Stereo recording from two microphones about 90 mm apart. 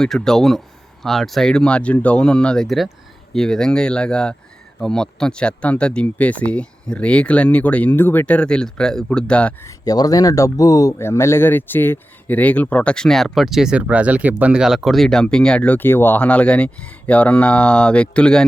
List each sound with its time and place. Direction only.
0.0 s speech: 5° left (ahead or behind)
9.6 s speech: 40° left (ahead or behind); by 18.4 s 10° left (ahead or behind)